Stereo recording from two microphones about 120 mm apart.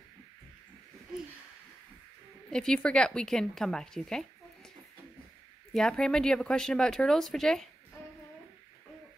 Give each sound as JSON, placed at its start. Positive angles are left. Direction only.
{"t": 2.5, "sound": "speech", "side_deg": 5}
{"t": 5.7, "sound": "speech", "side_deg": 5}